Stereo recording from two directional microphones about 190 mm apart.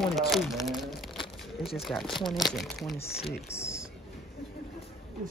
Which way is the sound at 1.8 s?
Centre (ahead or behind).